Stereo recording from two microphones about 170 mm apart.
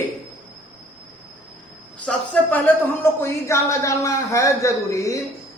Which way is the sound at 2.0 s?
10° left (ahead or behind).